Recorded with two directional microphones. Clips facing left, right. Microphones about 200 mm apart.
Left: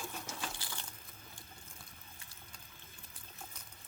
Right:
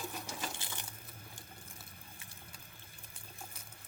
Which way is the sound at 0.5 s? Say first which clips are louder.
Right 1 dB; 20° right (ahead or behind).